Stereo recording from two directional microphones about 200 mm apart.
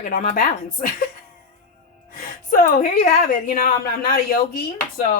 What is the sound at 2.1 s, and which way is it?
Speech, 45° left (ahead or behind).